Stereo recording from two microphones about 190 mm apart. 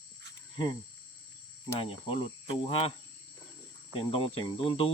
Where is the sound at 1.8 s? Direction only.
30° left (ahead or behind).